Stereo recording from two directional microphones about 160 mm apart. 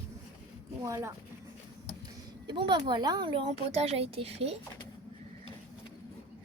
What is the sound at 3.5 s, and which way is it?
A woman's voice, 40° right (ahead or behind).